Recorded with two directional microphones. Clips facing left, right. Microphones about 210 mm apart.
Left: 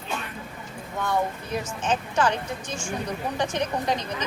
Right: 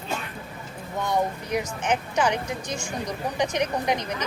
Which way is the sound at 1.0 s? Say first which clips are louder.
Right 1 dB; 15° right (ahead or behind).